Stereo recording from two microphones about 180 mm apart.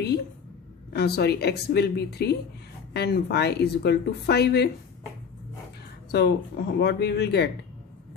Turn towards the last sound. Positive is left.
turn(degrees=65)  # may be behind; listen again after turning